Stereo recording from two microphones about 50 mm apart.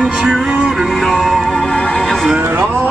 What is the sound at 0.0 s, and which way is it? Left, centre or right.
Music, centre.